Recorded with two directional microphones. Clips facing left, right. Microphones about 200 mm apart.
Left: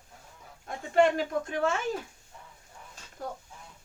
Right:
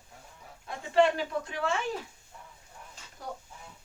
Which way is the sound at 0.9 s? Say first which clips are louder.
Left 1 dB; 45° left (ahead or behind).